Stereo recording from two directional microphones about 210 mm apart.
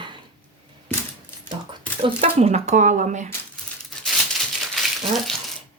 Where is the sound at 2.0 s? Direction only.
30° right (ahead or behind).